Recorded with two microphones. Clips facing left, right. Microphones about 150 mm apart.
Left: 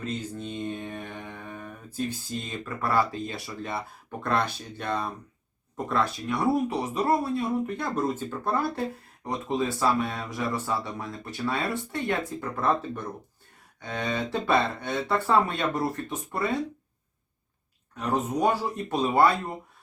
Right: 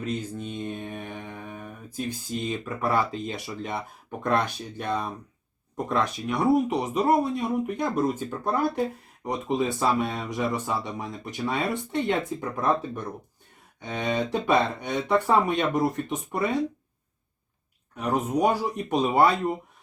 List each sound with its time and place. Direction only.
0.0 s mantra: 10° right (ahead or behind)
4.2 s speech: 15° right (ahead or behind)
17.9 s speech: 10° right (ahead or behind)